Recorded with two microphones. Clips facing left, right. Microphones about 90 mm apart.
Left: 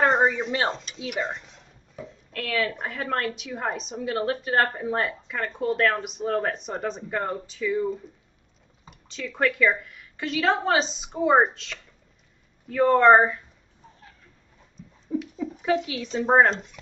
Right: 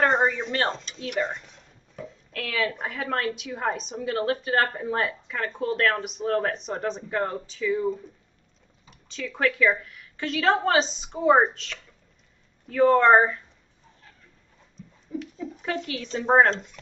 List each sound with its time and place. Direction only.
0.0 s a woman's voice: 5° left (ahead or behind)
9.1 s a woman's voice: centre (ahead or behind)
15.1 s a sound: 60° left (ahead or behind)
15.6 s a woman's voice: 5° left (ahead or behind)